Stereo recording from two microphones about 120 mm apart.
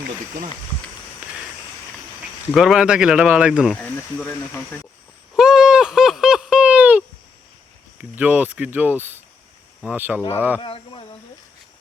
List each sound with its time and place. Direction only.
2.6 s speech: 5° right (ahead or behind)
3.8 s speech: 10° left (ahead or behind)
5.4 s a sound: 5° right (ahead or behind)
8.1 s speech: 10° right (ahead or behind)
10.6 s speech: 50° left (ahead or behind)